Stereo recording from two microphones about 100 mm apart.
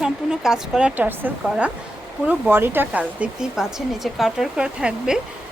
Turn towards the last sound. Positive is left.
turn(degrees=-5)  # may be behind; listen again after turning